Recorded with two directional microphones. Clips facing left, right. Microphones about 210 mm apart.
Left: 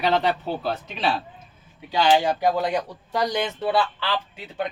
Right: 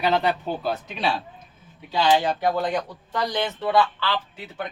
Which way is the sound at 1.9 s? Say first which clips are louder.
Left 1 dB; 10° left (ahead or behind).